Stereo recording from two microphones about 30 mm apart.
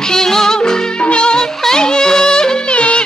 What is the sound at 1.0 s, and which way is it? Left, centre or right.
Music, left.